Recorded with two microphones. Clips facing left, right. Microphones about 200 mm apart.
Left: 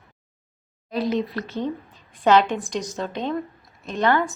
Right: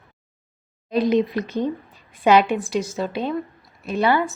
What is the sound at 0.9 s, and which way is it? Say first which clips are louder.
A woman's voice: right 5 dB; 15° right (ahead or behind).